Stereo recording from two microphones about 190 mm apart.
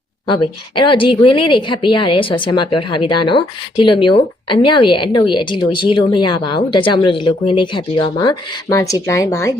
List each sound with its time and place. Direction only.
0.3 s speech: 25° left (ahead or behind)